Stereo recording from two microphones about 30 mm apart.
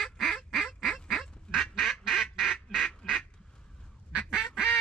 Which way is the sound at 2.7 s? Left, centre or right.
Centre.